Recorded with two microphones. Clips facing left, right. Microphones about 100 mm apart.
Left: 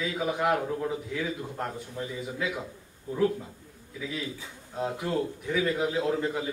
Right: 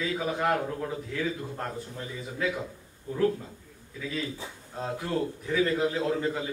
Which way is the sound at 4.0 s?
15° left (ahead or behind).